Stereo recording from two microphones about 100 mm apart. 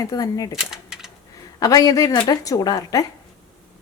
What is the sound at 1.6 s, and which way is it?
A woman's voice, 40° left (ahead or behind).